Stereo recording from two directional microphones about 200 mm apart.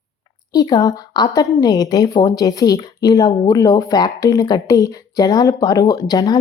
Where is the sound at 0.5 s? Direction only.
20° left (ahead or behind).